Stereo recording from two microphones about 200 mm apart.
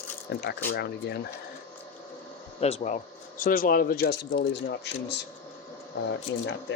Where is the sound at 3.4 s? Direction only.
45° left (ahead or behind).